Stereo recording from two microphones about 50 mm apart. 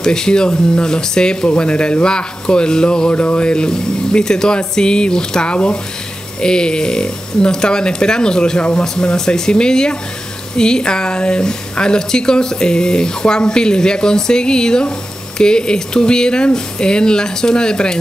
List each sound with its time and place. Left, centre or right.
0.0 s speech: centre